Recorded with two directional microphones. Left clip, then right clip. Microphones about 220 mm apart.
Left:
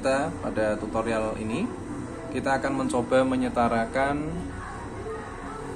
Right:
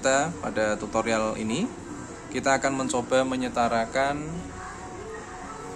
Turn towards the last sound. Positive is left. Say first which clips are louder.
# even
turn(degrees=-15)  # may be behind; listen again after turning